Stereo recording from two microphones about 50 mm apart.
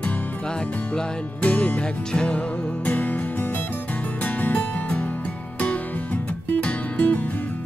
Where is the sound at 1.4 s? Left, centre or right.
Left.